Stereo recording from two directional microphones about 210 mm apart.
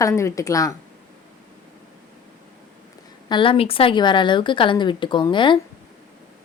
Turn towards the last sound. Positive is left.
turn(degrees=20)  # may be behind; listen again after turning